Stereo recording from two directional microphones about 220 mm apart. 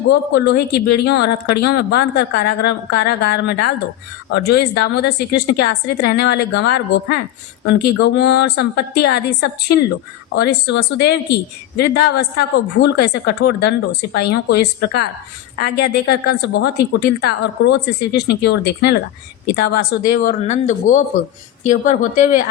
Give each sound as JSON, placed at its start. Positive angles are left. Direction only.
{"t": 0.1, "sound": "a woman's voice", "side_deg": 50}